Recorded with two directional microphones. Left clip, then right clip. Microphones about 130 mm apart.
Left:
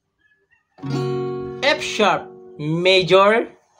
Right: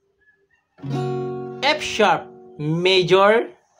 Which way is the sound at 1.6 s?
20° right (ahead or behind).